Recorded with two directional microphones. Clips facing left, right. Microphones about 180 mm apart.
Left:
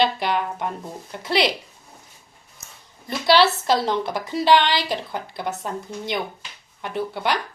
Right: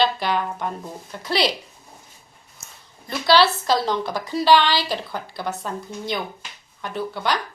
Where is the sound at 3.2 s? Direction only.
20° left (ahead or behind).